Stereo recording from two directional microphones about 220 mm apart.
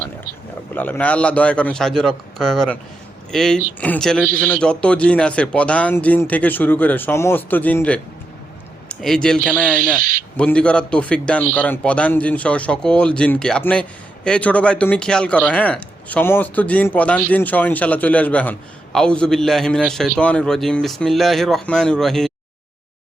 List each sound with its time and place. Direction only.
0.7 s speech: 10° left (ahead or behind)
9.7 s speech: 40° right (ahead or behind)
10.3 s speech: 5° left (ahead or behind)